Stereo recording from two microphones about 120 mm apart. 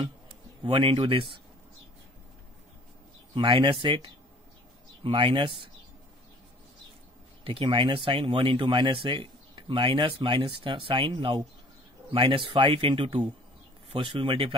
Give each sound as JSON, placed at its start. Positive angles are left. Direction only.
{"t": 0.7, "sound": "speech", "side_deg": -45}
{"t": 3.3, "sound": "speech", "side_deg": -45}
{"t": 7.4, "sound": "speech", "side_deg": -45}